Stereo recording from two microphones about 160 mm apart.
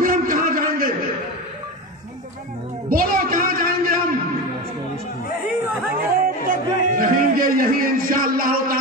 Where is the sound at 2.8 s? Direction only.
65° right (ahead or behind).